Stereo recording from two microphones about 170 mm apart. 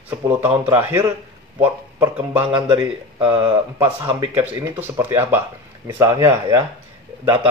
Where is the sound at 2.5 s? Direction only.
30° right (ahead or behind).